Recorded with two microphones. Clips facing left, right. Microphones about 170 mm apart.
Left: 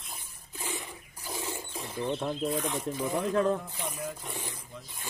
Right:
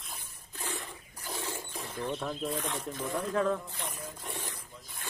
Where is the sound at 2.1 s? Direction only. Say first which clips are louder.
Left 4 dB; 20° left (ahead or behind).